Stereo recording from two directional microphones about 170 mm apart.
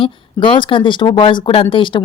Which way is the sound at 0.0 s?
30° left (ahead or behind).